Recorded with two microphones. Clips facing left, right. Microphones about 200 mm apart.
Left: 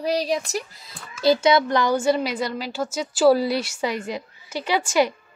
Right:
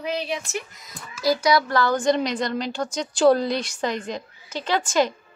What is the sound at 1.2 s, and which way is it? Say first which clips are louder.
A woman's voice: left 3 dB; 25° left (ahead or behind).